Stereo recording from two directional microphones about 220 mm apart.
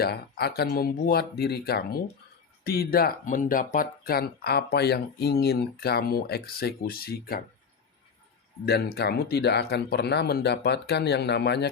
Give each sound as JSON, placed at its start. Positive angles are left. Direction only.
{"t": 0.0, "sound": "speech", "side_deg": 45}
{"t": 8.6, "sound": "speech", "side_deg": 45}